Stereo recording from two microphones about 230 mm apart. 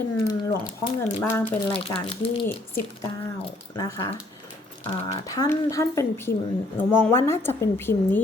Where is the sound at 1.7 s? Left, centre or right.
Left.